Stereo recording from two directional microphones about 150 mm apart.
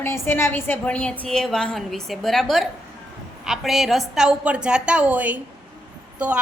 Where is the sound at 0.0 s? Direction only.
15° left (ahead or behind).